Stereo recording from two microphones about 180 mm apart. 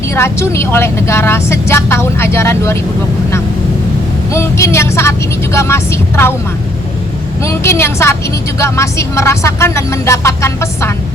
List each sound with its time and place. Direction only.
0.1 s a woman's voice: 15° left (ahead or behind)
4.3 s a woman's voice: 15° left (ahead or behind)
7.4 s a woman's voice: 15° left (ahead or behind)